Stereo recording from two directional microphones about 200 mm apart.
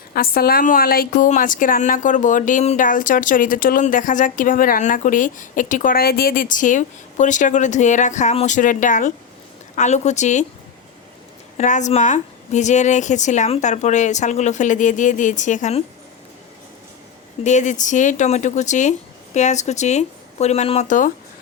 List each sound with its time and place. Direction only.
0.1 s a woman's voice: 50° left (ahead or behind)
11.5 s a woman's voice: 35° left (ahead or behind)
17.4 s a woman's voice: 35° left (ahead or behind)